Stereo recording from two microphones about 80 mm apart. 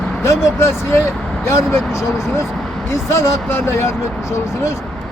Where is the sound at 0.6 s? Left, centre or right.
Left.